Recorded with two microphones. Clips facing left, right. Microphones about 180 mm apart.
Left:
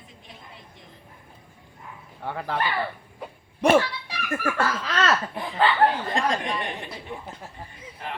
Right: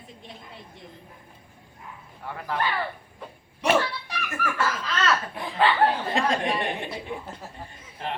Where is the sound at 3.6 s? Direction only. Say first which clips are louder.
Left 4 dB; 55° left (ahead or behind).